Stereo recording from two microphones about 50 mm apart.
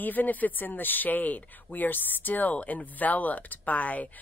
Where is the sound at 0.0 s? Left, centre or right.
Left.